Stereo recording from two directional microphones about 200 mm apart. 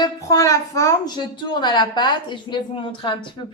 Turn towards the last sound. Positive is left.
turn(degrees=25)  # may be behind; listen again after turning